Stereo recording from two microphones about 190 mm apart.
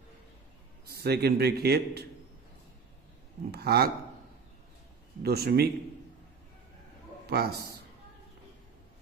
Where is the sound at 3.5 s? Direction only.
55° right (ahead or behind).